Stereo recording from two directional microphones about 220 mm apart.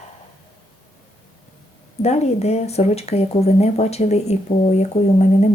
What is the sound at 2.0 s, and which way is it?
Speech, 30° left (ahead or behind).